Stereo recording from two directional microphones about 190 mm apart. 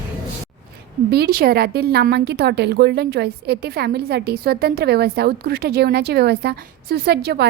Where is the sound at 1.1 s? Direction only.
55° right (ahead or behind).